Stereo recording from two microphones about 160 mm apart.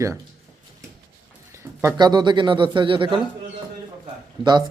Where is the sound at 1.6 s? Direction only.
15° right (ahead or behind).